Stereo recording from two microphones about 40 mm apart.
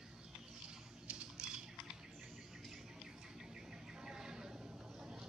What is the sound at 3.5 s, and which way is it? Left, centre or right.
Livestock, centre.